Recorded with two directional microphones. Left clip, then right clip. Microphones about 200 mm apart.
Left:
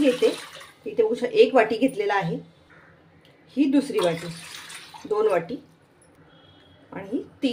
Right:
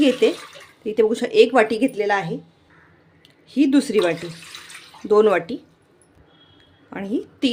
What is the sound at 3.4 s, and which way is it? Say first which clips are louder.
Speech: right 4 dB; 40° right (ahead or behind).